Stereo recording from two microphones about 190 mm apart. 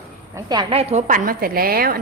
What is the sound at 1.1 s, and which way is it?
Speech, 45° right (ahead or behind).